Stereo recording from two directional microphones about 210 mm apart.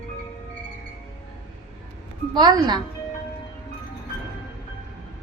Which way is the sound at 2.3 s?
20° right (ahead or behind).